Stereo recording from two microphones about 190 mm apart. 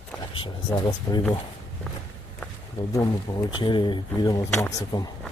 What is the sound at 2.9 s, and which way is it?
Speech, 15° left (ahead or behind).